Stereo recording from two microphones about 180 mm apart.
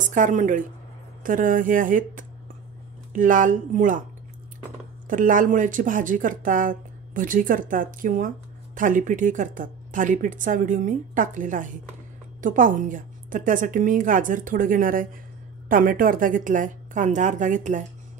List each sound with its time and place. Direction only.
0.0 s speech: 45° right (ahead or behind)
5.0 s speech: 50° right (ahead or behind)